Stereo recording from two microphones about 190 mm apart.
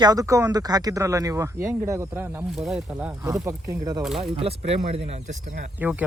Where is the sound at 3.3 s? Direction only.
15° right (ahead or behind).